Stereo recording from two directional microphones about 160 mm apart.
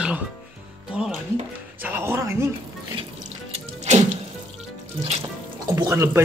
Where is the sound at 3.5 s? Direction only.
45° right (ahead or behind).